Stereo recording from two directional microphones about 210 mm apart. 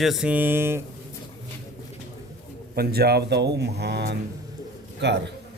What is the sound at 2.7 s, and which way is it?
A man's voice, 45° right (ahead or behind).